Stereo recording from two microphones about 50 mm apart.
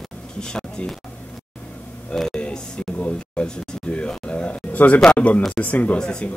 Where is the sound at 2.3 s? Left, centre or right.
Centre.